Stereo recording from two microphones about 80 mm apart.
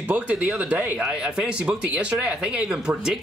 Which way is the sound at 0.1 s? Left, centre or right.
Centre.